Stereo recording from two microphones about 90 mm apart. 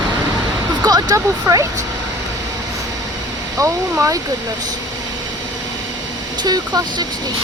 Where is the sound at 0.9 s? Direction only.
45° right (ahead or behind).